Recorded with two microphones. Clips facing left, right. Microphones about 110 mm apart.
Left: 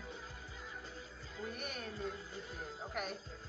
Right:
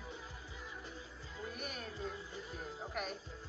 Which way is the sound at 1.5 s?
Centre (ahead or behind).